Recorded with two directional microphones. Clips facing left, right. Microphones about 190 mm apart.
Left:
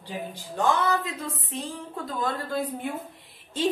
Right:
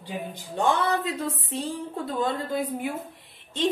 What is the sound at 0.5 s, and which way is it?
Speech, 30° right (ahead or behind).